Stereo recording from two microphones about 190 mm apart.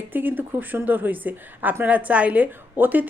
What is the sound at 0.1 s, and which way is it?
A woman's voice, 10° right (ahead or behind).